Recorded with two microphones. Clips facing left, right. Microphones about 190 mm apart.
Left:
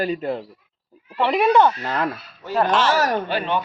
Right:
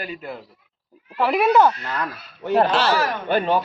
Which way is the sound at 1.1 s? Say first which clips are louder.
Even; centre (ahead or behind).